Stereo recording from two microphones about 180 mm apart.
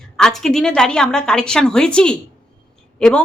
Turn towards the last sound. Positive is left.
turn(degrees=5)  # may be behind; listen again after turning